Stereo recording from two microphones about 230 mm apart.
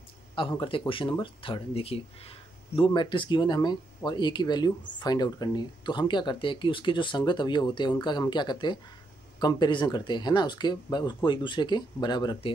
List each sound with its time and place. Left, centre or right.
0.4 s speech: left